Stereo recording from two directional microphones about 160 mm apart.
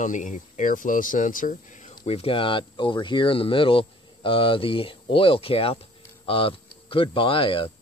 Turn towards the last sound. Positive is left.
turn(degrees=35)  # may be behind; listen again after turning